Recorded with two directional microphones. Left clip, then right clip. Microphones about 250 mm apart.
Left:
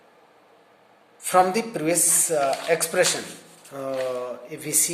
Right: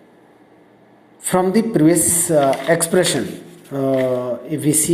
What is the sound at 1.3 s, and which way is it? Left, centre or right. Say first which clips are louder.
Speech: right 3 dB; centre.